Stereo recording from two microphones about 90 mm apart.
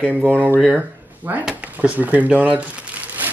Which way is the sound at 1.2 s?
25° right (ahead or behind).